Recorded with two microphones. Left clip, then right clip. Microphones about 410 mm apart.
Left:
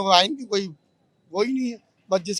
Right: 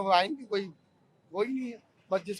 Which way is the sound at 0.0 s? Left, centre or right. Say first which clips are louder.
Left 7 dB; left.